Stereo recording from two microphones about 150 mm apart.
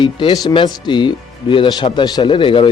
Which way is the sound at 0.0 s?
35° left (ahead or behind).